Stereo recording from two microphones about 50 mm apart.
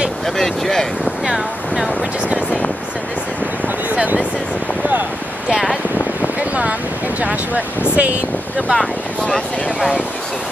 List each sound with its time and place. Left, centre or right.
0.4 s speech: centre
1.2 s speech: centre
3.6 s a sound: right
5.5 s speech: centre
7.2 s speech: right
8.7 s speech: centre